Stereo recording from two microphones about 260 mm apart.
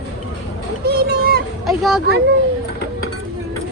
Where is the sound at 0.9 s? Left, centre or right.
Right.